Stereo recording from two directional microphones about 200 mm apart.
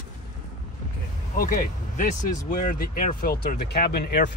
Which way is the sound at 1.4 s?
45° left (ahead or behind).